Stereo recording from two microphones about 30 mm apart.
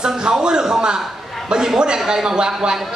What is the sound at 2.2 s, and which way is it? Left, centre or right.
Speech, right.